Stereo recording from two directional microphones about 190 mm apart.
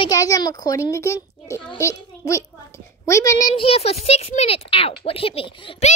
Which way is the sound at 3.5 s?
30° left (ahead or behind).